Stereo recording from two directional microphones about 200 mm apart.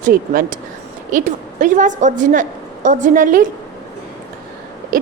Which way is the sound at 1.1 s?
40° right (ahead or behind).